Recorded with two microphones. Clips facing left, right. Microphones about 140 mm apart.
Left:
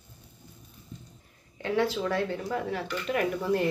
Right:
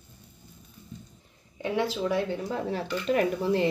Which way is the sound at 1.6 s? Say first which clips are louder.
Left 1 dB; 15° right (ahead or behind).